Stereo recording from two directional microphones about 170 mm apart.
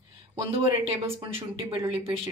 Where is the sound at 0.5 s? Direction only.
35° right (ahead or behind).